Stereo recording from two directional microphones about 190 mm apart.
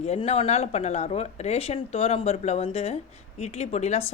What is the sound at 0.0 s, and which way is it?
Speech, 35° left (ahead or behind).